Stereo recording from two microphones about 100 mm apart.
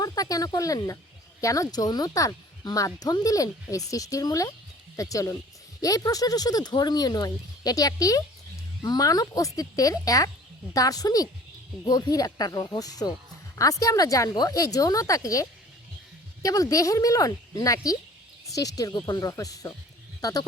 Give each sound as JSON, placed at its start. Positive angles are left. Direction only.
{"t": 0.0, "sound": "speech", "side_deg": 40}